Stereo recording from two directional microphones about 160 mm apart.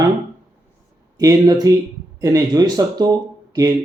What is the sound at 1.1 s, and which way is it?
Speech, 25° right (ahead or behind).